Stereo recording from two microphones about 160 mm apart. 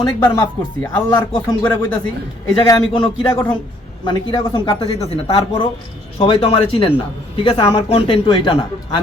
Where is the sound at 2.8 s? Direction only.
35° left (ahead or behind).